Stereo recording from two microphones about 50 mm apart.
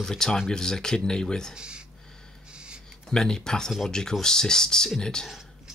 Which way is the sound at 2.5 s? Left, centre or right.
Centre.